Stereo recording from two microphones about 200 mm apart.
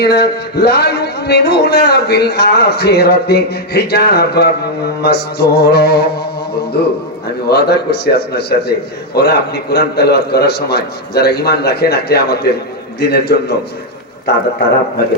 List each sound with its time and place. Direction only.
0.0 s a man's voice: 55° left (ahead or behind)